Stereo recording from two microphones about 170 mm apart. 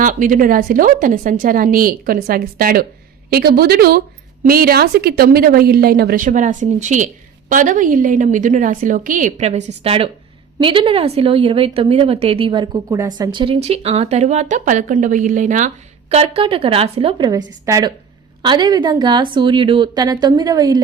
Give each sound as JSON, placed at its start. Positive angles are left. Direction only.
{"t": 0.0, "sound": "a woman's voice", "side_deg": -50}